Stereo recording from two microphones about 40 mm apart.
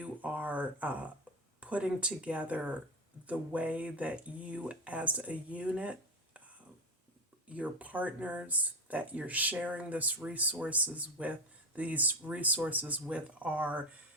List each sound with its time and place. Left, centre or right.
0.0 s a sound: right
1.6 s speech: right
7.4 s speech: right